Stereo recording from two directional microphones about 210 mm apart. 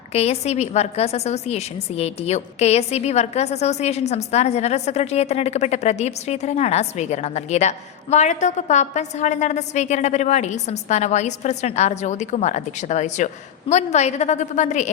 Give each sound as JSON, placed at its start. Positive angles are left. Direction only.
{"t": 0.1, "sound": "a woman's voice", "side_deg": 30}